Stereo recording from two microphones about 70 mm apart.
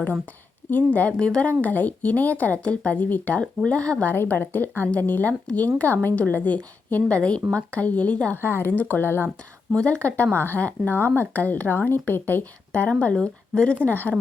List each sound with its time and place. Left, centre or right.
0.9 s speech: left
4.1 s speech: left
8.4 s speech: left
9.7 s speech: centre